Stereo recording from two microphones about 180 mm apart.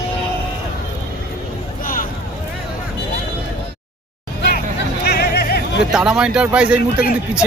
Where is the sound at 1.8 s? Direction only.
50° left (ahead or behind).